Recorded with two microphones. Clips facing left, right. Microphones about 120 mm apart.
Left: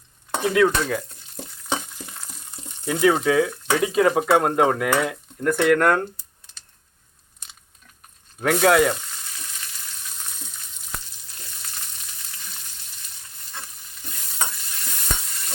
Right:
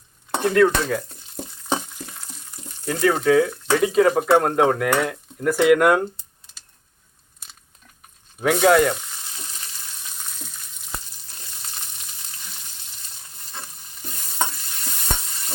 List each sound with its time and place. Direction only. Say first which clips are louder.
0.4 s speech: right 2 dB; centre (ahead or behind)
2.8 s speech: even; 5° left (ahead or behind); by 6.1 s 10° right (ahead or behind)
7.4 s biting: even; 5° right (ahead or behind)
8.4 s speech: right 1 dB; centre (ahead or behind)